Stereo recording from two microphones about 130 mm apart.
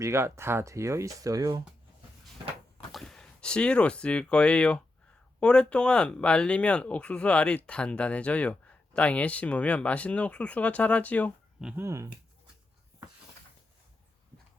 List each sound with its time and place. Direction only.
0.0 s speech: 20° right (ahead or behind)
2.9 s speech: 5° left (ahead or behind)
11.8 s speech: 20° right (ahead or behind)